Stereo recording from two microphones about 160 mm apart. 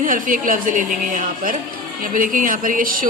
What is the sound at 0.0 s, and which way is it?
A woman's voice, 60° right (ahead or behind).